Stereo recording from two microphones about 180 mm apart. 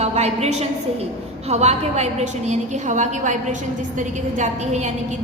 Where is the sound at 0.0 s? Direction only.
35° right (ahead or behind).